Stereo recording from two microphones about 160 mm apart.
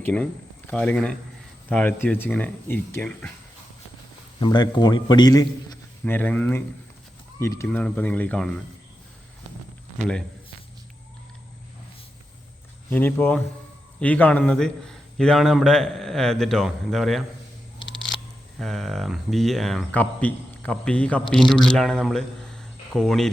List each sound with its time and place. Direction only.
0.0 s speech: 10° left (ahead or behind)
4.4 s a man's voice: 25° left (ahead or behind)
6.1 s speech: 10° left (ahead or behind)
12.9 s speech: 10° left (ahead or behind)
18.6 s speech: centre (ahead or behind)